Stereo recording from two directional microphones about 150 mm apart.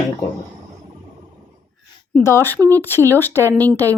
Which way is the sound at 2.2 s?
20° left (ahead or behind).